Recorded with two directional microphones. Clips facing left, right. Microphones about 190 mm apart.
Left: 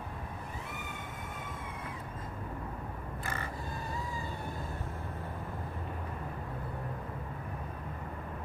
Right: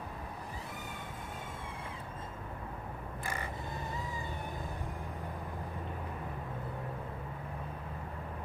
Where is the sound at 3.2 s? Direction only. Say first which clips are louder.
Even; 20° right (ahead or behind).